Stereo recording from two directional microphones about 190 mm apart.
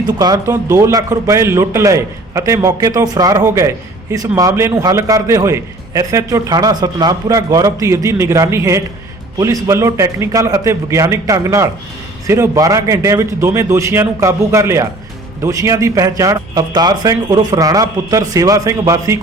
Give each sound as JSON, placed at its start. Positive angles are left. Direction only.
{"t": 0.0, "sound": "a man's voice", "side_deg": -20}